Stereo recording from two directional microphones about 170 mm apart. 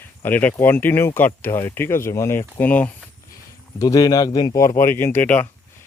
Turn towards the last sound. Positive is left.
turn(degrees=10)  # may be behind; listen again after turning